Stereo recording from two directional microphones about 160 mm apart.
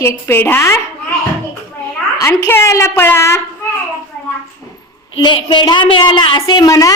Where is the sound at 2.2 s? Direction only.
15° left (ahead or behind).